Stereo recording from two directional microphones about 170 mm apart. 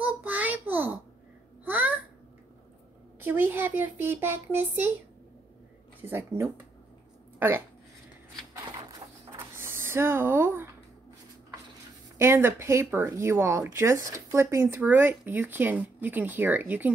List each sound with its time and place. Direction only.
0.0 s child singing: 10° right (ahead or behind)
1.6 s a sound: 10° right (ahead or behind)
3.2 s speech: 10° right (ahead or behind)
6.0 s speech: 15° right (ahead or behind)
9.6 s speech: 15° right (ahead or behind)
12.2 s speech: 15° right (ahead or behind)